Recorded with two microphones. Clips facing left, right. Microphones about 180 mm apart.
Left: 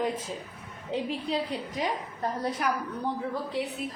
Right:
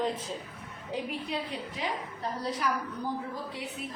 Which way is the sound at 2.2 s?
55° left (ahead or behind).